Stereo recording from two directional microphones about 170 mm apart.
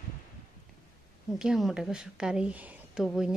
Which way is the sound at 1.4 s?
5° right (ahead or behind).